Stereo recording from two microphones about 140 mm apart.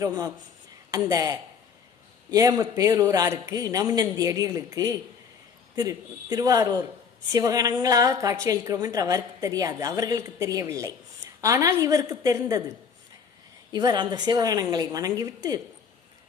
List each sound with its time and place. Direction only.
0.0 s a woman's voice: 25° right (ahead or behind)
13.7 s a woman's voice: 30° right (ahead or behind)